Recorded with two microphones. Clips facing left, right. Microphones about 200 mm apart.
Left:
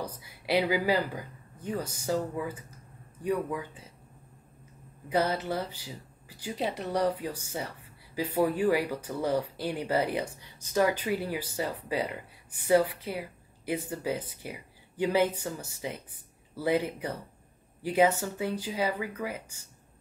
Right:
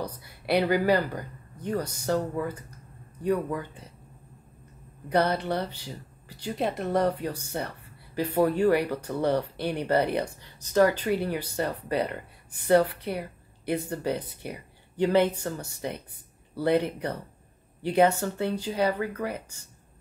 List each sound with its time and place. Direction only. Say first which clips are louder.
0.0 s speech: right 3 dB; 5° left (ahead or behind)
5.1 s speech: right 3 dB; 5° left (ahead or behind)